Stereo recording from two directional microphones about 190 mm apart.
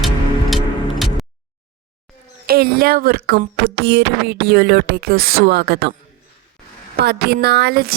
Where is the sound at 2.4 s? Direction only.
55° right (ahead or behind).